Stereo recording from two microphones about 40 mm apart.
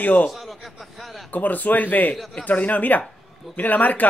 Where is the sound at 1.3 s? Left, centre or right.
Left.